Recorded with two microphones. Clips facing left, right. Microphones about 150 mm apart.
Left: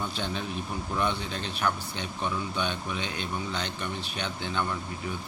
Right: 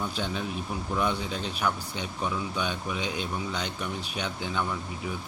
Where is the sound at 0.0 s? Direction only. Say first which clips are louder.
Right 1 dB; 10° right (ahead or behind).